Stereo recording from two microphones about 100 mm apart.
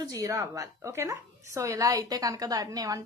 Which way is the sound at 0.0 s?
35° right (ahead or behind).